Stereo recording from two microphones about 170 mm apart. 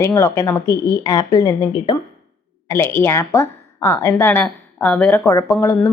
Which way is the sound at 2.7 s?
15° left (ahead or behind).